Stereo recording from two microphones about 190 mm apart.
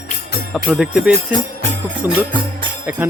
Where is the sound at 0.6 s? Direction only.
5° right (ahead or behind).